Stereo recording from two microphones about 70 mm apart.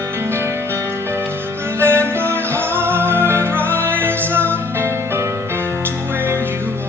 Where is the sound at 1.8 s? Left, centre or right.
Right.